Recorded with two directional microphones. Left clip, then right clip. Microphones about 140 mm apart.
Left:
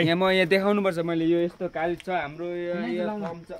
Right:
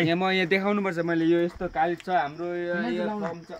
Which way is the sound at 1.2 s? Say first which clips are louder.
Even; 35° left (ahead or behind).